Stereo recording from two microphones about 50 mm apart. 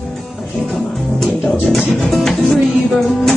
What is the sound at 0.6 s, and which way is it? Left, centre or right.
Music, centre.